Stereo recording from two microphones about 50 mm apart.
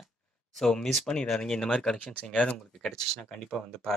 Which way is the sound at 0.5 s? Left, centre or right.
Centre.